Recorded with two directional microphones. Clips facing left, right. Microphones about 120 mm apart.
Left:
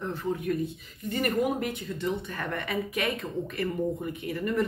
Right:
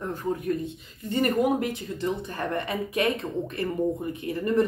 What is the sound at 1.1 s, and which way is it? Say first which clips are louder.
Speech: right 4 dB; 30° right (ahead or behind).